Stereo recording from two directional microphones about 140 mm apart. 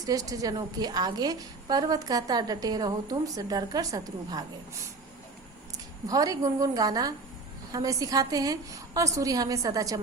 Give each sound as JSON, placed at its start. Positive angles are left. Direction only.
{"t": 0.0, "sound": "a woman's voice", "side_deg": -25}
{"t": 6.1, "sound": "a woman's voice", "side_deg": -25}